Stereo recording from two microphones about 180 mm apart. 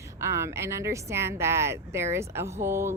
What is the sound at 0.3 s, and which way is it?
Speech, 15° right (ahead or behind).